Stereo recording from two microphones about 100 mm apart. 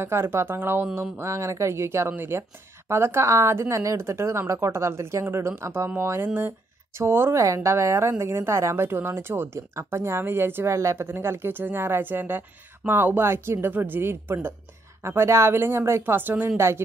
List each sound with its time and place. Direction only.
0.0 s speech: 25° right (ahead or behind)